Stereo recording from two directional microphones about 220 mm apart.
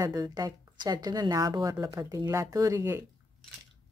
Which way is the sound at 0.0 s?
15° right (ahead or behind).